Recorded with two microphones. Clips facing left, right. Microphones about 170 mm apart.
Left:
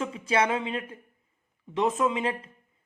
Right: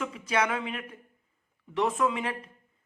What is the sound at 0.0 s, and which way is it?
A woman's voice, 30° left (ahead or behind).